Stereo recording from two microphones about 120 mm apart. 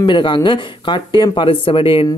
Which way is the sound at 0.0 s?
40° left (ahead or behind).